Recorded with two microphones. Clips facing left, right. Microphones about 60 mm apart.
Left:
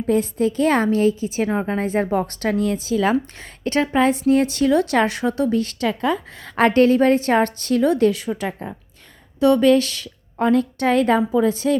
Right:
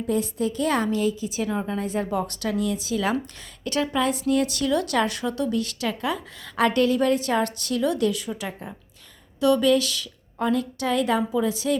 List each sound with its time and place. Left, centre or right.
0.1 s a woman's voice: left
8.3 s a woman's voice: left
9.4 s a woman's voice: left